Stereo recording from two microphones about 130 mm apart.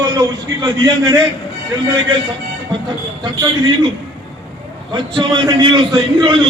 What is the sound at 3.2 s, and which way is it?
Speech, 35° right (ahead or behind).